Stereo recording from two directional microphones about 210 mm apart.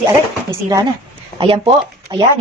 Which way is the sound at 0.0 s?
15° right (ahead or behind).